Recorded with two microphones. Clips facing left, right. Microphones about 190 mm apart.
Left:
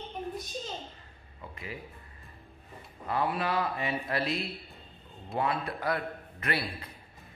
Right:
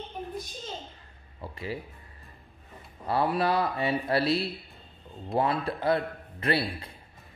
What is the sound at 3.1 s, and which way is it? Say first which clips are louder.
A man's voice: right 4 dB; 35° right (ahead or behind).